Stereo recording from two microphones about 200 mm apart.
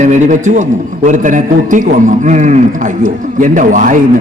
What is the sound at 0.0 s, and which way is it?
A man's voice, 40° right (ahead or behind).